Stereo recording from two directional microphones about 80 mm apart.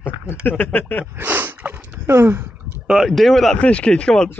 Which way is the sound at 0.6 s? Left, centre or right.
Left.